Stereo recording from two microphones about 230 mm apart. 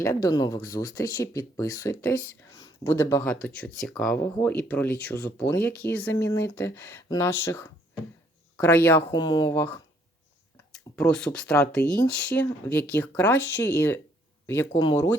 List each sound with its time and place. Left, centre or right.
0.0 s speech: centre